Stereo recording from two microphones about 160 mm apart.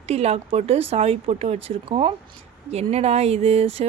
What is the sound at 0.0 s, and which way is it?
A woman's voice, 40° right (ahead or behind).